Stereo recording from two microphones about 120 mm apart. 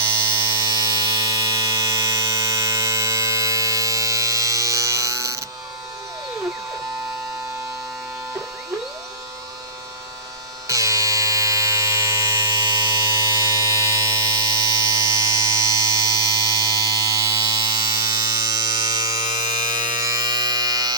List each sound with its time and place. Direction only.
0.6 s electric shaver: 30° right (ahead or behind)
10.7 s music: 25° right (ahead or behind)
12.6 s electric shaver: 35° right (ahead or behind)
19.7 s music: 35° right (ahead or behind)